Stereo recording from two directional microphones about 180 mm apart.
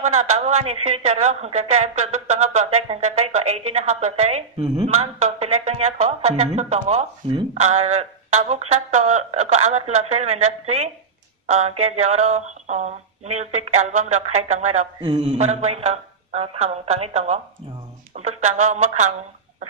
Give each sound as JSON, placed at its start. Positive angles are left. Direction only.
{"t": 0.0, "sound": "a woman's voice", "side_deg": -40}
{"t": 15.0, "sound": "mantra", "side_deg": -25}
{"t": 15.3, "sound": "a woman's voice", "side_deg": -35}